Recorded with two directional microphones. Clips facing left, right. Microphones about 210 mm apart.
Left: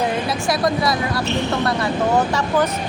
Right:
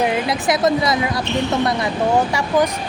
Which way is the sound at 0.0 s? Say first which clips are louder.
Right 2 dB; 20° right (ahead or behind).